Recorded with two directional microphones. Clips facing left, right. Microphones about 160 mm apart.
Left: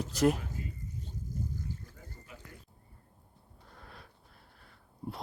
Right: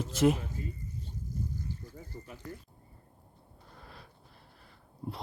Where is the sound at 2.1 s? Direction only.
60° right (ahead or behind).